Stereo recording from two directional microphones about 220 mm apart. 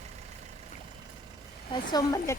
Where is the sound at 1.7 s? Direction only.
20° left (ahead or behind).